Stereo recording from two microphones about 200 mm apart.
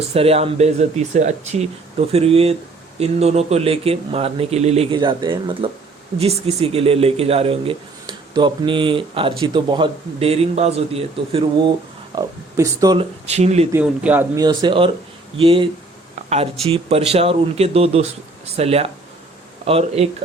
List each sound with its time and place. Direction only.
0.1 s speech: 30° right (ahead or behind)
12.1 s speech: 20° right (ahead or behind)
13.0 s speech: 30° right (ahead or behind)
13.7 s speech: 10° right (ahead or behind); by 15.6 s 25° right (ahead or behind)
16.6 s speech: 30° right (ahead or behind)